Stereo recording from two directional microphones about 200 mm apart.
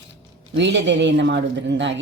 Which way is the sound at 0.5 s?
60° right (ahead or behind).